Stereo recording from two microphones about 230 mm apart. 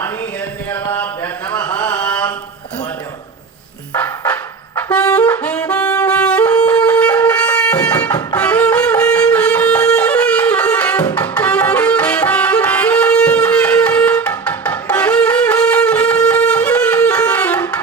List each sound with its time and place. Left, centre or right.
1.7 s mantra: centre
2.0 s mantra: centre
3.9 s a sound: centre
4.9 s saxophone: centre
8.4 s music: centre
13.4 s wind instrument: centre
16.2 s music: centre
16.6 s wind instrument: centre